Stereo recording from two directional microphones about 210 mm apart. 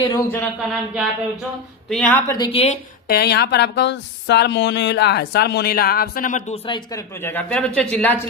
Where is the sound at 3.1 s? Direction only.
50° left (ahead or behind).